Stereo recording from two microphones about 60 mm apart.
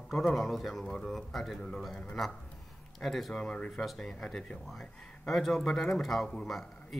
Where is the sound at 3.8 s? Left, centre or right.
Centre.